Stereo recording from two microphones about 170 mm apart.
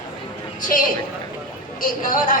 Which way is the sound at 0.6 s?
50° left (ahead or behind).